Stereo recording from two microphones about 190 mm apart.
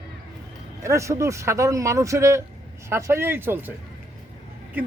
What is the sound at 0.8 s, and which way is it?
Speech, 15° right (ahead or behind).